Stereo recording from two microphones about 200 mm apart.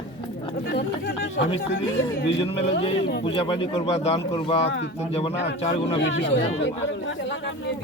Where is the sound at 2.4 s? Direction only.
30° left (ahead or behind).